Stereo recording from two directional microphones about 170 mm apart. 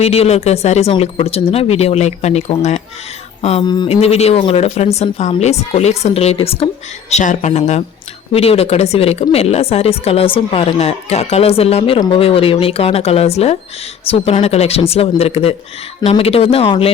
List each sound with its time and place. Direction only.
0.0 s a woman's voice: 35° left (ahead or behind)
3.7 s a woman's voice: 30° left (ahead or behind)